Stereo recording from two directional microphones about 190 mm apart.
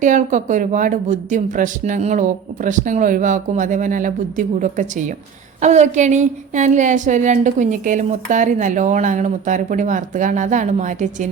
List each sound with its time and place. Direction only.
0.0 s a woman's voice: 40° right (ahead or behind)